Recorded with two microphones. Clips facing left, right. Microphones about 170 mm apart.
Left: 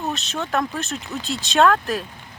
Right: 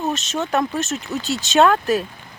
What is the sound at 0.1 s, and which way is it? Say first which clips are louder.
Speech: right 3 dB; centre (ahead or behind).